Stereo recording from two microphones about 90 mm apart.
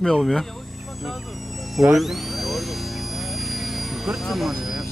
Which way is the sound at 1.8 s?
Centre (ahead or behind).